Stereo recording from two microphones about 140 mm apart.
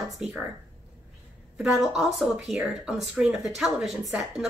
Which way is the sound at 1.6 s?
5° right (ahead or behind).